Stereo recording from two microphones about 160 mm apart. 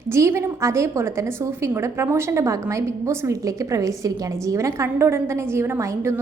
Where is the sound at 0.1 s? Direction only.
15° right (ahead or behind).